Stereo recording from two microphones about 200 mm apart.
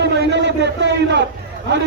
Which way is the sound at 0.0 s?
60° right (ahead or behind).